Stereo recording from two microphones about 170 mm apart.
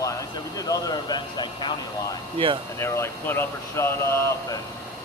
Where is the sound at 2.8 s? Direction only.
15° left (ahead or behind).